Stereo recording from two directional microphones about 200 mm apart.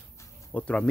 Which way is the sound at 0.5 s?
5° left (ahead or behind).